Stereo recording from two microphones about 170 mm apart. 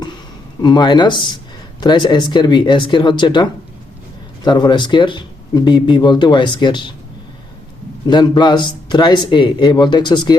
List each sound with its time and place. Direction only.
0.6 s speech: 25° left (ahead or behind)
8.0 s speech: 25° left (ahead or behind)